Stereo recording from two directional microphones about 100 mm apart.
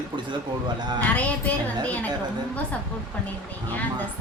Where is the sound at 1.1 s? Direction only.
15° left (ahead or behind).